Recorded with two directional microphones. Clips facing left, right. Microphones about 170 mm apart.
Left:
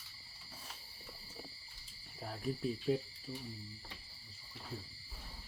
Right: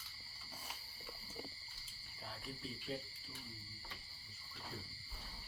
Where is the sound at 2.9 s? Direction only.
55° left (ahead or behind).